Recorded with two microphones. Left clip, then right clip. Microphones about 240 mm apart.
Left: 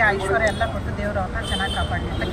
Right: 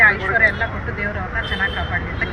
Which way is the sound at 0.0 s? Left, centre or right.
Centre.